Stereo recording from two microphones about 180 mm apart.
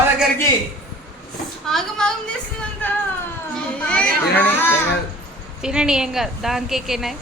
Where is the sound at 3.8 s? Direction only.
10° left (ahead or behind).